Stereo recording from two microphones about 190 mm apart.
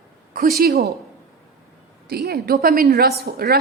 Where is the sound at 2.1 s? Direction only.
55° right (ahead or behind).